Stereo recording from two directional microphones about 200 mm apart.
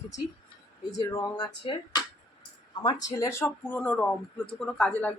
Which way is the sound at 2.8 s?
20° left (ahead or behind).